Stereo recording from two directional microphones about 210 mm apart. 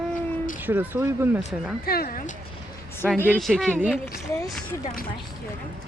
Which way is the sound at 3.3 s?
Centre (ahead or behind).